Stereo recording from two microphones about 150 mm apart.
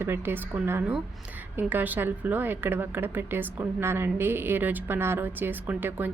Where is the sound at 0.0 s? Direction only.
15° right (ahead or behind).